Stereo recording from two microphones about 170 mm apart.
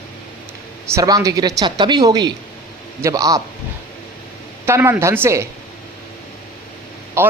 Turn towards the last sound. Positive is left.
turn(degrees=-15)  # may be behind; listen again after turning